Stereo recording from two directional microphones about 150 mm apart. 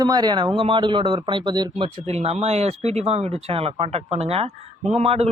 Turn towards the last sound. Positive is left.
turn(degrees=-45)  # may be behind; listen again after turning